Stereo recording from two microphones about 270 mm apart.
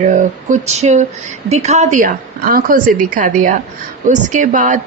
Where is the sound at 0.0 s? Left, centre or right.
Right.